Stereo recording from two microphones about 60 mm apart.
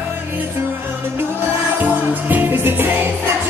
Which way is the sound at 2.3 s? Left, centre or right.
Right.